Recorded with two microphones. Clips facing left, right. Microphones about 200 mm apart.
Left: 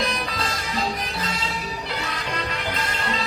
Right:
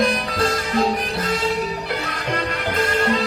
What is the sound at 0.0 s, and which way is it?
Music, 55° right (ahead or behind).